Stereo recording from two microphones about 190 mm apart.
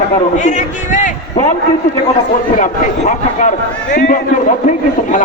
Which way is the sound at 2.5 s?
40° left (ahead or behind).